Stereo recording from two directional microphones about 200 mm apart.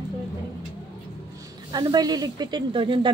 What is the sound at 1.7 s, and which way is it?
Speech, 20° right (ahead or behind).